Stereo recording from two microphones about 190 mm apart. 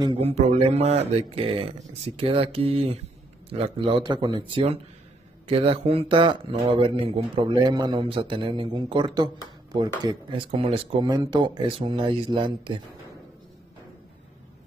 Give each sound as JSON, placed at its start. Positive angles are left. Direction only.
{"t": 0.0, "sound": "speech", "side_deg": -30}